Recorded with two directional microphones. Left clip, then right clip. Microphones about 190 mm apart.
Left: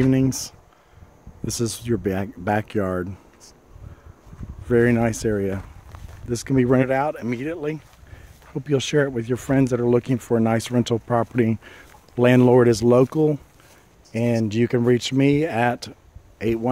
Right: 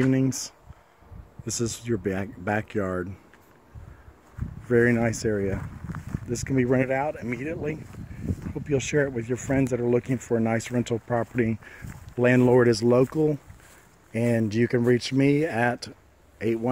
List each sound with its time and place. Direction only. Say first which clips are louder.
0.0 s speech: left 4 dB; 5° left (ahead or behind)
1.4 s speech: left 4 dB; 10° left (ahead or behind)
4.7 s speech: left 3 dB; 10° left (ahead or behind)
14.1 s speech: left 2 dB; 5° left (ahead or behind)